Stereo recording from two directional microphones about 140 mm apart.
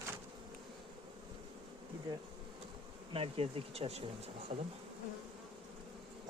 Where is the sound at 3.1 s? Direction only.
40° right (ahead or behind).